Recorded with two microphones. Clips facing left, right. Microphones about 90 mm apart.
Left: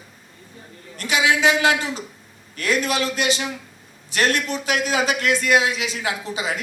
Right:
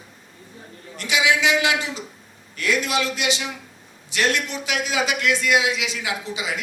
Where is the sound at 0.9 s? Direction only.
45° left (ahead or behind).